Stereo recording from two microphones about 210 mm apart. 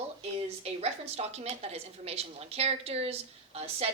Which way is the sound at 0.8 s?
30° right (ahead or behind).